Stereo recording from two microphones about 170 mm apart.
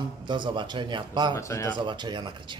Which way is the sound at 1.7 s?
25° right (ahead or behind).